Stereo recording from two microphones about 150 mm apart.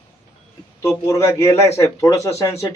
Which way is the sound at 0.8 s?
20° left (ahead or behind).